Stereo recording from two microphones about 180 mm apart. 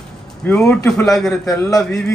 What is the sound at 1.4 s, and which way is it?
Speech, 15° left (ahead or behind).